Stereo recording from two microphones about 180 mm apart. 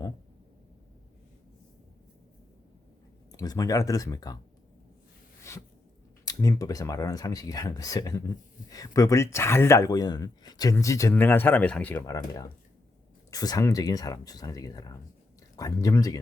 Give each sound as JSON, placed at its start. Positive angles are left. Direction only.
{"t": 3.3, "sound": "speech", "side_deg": 20}
{"t": 5.5, "sound": "a sound", "side_deg": 15}
{"t": 6.2, "sound": "speech", "side_deg": 20}